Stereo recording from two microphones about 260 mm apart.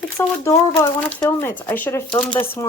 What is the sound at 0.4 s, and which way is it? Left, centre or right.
Speech, centre.